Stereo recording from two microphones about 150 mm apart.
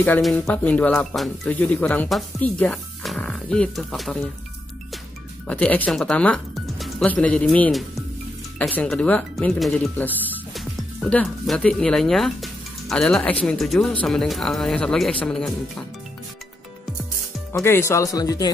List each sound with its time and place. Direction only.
0.2 s speech: 5° left (ahead or behind)
5.5 s speech: 10° left (ahead or behind)
17.5 s speech: 15° left (ahead or behind)